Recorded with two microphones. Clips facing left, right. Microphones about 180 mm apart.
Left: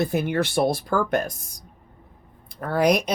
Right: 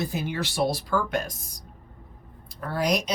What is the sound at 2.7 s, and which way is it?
Speech, 55° left (ahead or behind).